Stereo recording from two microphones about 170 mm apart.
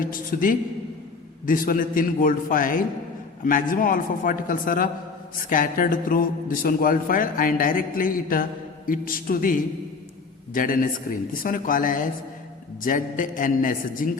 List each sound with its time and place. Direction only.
0.0 s a man's voice: 55° left (ahead or behind)